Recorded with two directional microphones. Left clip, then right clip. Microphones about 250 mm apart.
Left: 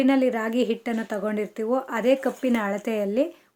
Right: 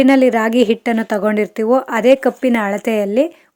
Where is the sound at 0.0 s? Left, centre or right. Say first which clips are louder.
Right 10 dB; right.